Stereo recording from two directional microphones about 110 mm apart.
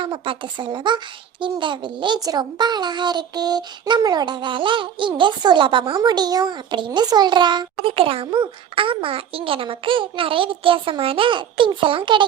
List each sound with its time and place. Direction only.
0.0 s a child's voice: 45° right (ahead or behind)
6.0 s a child's voice: 40° right (ahead or behind)